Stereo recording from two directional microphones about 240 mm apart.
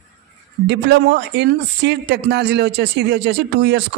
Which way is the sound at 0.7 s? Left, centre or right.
Right.